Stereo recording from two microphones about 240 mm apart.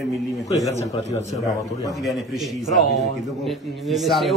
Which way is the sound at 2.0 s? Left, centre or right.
Centre.